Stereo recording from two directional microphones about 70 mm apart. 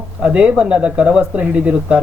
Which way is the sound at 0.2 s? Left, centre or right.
Centre.